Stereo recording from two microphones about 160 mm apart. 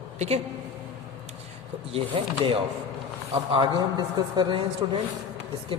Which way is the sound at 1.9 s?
35° right (ahead or behind).